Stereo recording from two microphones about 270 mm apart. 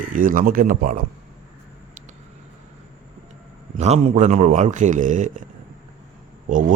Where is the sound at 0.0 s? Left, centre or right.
Right.